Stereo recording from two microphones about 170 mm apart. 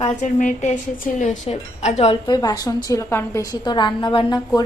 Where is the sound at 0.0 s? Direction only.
45° left (ahead or behind).